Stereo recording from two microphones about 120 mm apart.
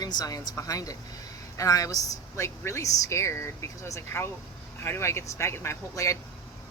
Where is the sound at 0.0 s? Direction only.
35° left (ahead or behind).